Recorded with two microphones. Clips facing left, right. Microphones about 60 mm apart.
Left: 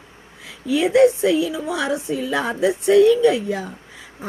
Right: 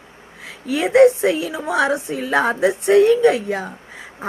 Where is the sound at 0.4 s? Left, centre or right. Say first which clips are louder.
Left 2 dB; right.